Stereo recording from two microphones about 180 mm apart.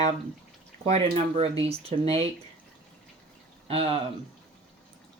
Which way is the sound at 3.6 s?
30° right (ahead or behind).